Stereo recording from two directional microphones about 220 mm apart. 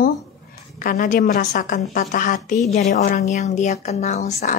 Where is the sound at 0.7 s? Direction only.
40° left (ahead or behind).